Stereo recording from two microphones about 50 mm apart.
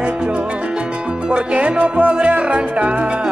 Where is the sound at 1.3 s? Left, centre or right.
Right.